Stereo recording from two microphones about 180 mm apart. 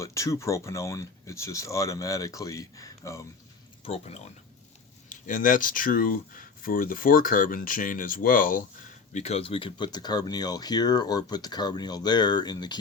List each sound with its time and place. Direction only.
0.0 s speech: 15° left (ahead or behind)
3.8 s speech: 35° left (ahead or behind)
5.0 s speech: 50° left (ahead or behind)
9.1 s speech: 35° left (ahead or behind)